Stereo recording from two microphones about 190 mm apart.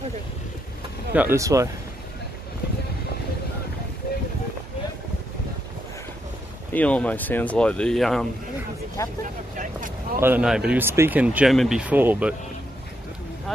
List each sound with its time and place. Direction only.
1.1 s speech: 10° right (ahead or behind)
6.7 s speech: 5° left (ahead or behind)
9.0 s speech: 15° left (ahead or behind)
9.6 s vehicle: 45° right (ahead or behind)
10.2 s speech: 5° right (ahead or behind)